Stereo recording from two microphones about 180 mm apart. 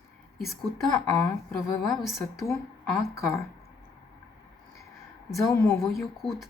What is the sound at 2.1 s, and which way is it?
Speech, 15° left (ahead or behind).